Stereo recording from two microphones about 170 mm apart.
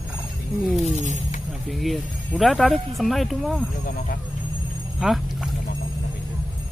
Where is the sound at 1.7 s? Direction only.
Centre (ahead or behind).